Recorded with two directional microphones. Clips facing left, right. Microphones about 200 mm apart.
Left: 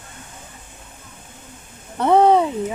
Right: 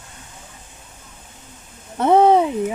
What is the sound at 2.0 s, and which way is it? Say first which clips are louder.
Speech: right 1 dB; 10° right (ahead or behind).